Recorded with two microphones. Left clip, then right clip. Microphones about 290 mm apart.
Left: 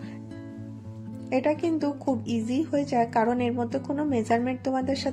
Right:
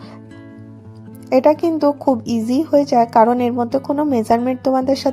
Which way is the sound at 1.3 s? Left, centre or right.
Right.